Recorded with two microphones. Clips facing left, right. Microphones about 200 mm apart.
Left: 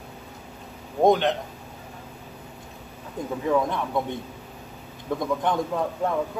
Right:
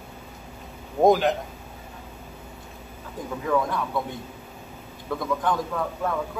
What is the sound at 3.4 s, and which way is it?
Speech, 25° left (ahead or behind).